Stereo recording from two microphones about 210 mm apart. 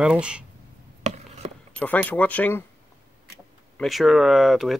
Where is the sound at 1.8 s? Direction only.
10° left (ahead or behind).